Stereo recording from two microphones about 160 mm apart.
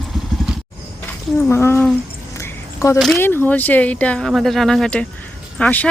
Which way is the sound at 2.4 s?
20° left (ahead or behind).